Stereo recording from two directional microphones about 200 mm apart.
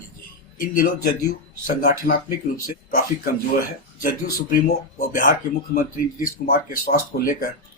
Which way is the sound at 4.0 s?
45° left (ahead or behind).